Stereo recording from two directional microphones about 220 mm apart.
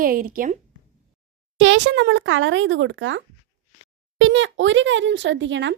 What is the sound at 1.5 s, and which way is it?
Speech, 60° right (ahead or behind).